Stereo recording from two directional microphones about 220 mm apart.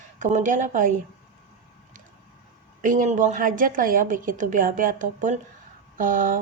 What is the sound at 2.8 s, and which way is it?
Speech, 35° right (ahead or behind).